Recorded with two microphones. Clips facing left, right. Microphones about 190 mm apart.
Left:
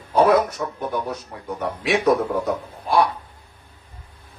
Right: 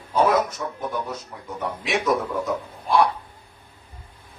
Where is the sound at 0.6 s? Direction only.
55° left (ahead or behind).